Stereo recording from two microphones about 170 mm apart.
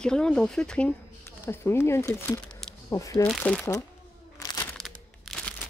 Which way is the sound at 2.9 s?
20° left (ahead or behind).